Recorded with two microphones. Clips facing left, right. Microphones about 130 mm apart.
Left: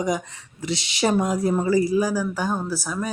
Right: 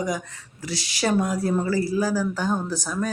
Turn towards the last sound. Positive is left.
turn(degrees=10)  # may be behind; listen again after turning